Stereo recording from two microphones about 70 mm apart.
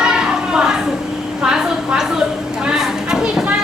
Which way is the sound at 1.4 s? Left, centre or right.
Centre.